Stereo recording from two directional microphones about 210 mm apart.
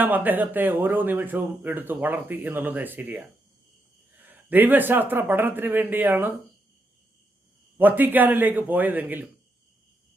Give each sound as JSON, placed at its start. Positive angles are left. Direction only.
{"t": 0.0, "sound": "speech", "side_deg": -10}
{"t": 7.8, "sound": "speech", "side_deg": -10}